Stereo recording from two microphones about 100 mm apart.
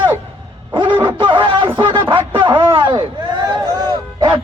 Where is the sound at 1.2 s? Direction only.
55° right (ahead or behind).